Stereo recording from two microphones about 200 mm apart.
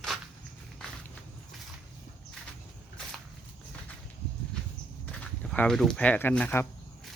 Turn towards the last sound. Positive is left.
turn(degrees=10)  # may be behind; listen again after turning